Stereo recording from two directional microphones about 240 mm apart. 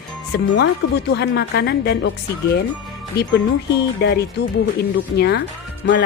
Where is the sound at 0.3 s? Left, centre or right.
Left.